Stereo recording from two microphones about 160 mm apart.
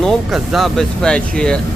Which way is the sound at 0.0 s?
Centre (ahead or behind).